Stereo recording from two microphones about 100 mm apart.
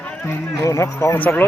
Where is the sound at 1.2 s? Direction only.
15° left (ahead or behind).